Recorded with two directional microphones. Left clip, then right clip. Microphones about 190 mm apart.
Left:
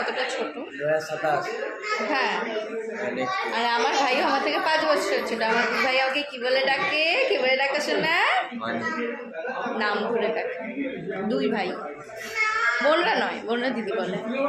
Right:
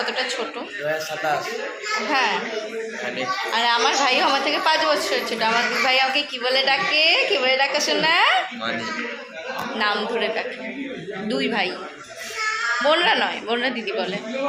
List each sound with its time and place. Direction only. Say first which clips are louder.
2.0 s a woman's voice: right 5 dB; 10° right (ahead or behind)
3.5 s a woman's voice: right 5 dB; 5° right (ahead or behind)
7.5 s a woman's voice: right 3 dB; 15° right (ahead or behind)
9.7 s a woman's voice: right 3 dB; centre (ahead or behind)
12.8 s a woman's voice: right 6 dB; centre (ahead or behind)